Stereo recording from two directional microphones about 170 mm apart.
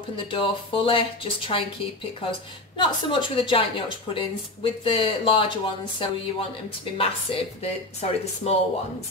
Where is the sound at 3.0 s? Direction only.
30° left (ahead or behind).